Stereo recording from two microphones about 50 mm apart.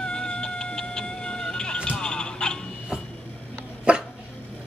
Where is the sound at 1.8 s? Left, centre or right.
Centre.